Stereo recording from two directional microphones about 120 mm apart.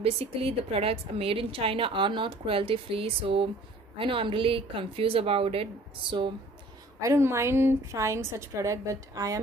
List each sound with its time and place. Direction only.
0.0 s a woman's voice: 55° right (ahead or behind)
7.0 s a woman's voice: 25° right (ahead or behind)